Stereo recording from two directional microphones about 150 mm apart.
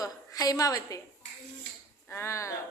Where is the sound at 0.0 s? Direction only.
25° left (ahead or behind).